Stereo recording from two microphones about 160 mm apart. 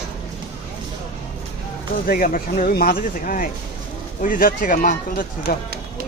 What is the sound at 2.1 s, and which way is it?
Speech, 60° left (ahead or behind).